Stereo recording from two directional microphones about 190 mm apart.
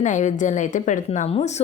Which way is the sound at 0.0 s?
40° left (ahead or behind).